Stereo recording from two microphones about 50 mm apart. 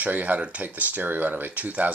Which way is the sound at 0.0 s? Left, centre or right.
Right.